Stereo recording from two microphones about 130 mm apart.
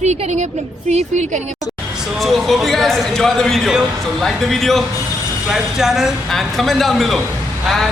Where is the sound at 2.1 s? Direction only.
Centre (ahead or behind).